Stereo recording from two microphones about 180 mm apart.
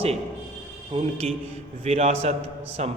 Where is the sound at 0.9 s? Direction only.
30° right (ahead or behind).